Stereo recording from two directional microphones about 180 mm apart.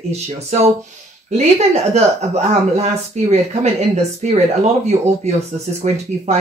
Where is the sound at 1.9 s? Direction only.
35° right (ahead or behind).